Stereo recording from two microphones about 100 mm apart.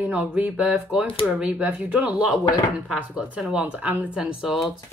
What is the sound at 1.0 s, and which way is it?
Speech, 70° left (ahead or behind).